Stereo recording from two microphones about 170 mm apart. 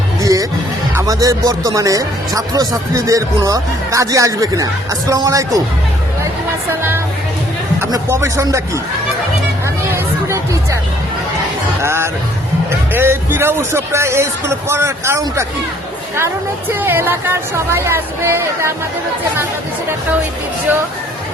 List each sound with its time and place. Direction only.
0.2 s music: 20° right (ahead or behind)
0.9 s speech: 20° right (ahead or behind)
7.8 s speech: 20° right (ahead or behind)
9.9 s chatter: 15° right (ahead or behind)
11.8 s speech: 15° right (ahead or behind)